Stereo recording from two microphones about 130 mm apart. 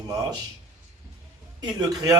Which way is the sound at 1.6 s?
30° right (ahead or behind).